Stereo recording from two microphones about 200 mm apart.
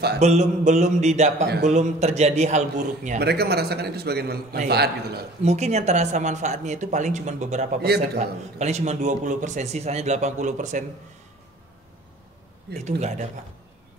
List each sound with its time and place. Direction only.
0.2 s a man's voice: 35° right (ahead or behind)
3.2 s a man's voice: 55° right (ahead or behind)
5.4 s a man's voice: 35° right (ahead or behind)
12.7 s a man's voice: 35° right (ahead or behind)